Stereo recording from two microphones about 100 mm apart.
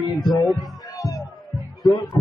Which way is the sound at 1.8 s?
45° left (ahead or behind).